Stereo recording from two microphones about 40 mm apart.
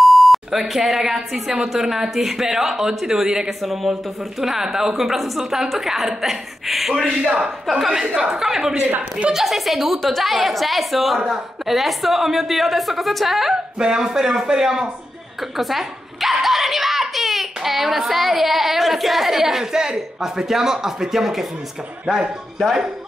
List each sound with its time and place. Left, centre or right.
0.0 s beep: centre
1.6 s speech: centre
3.4 s a woman's voice: centre
7.2 s a woman's voice: right; by 13.6 s centre
13.7 s speech: centre
15.5 s giggle: centre
22.0 s speech: right